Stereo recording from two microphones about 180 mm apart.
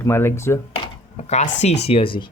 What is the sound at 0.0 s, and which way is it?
Speech, 15° left (ahead or behind).